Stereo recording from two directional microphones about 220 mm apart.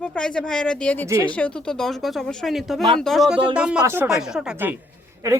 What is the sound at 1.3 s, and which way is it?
A woman's voice, 5° left (ahead or behind).